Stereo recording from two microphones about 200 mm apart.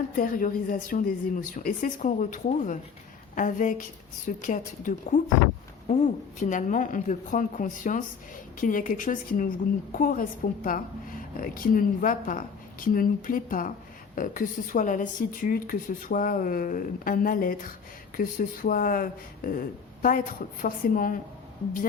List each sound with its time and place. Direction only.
0.2 s a woman's voice: 45° left (ahead or behind)
6.4 s a woman's voice: 40° left (ahead or behind)